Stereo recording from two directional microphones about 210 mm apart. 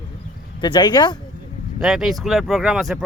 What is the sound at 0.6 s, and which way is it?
Speech, 20° left (ahead or behind).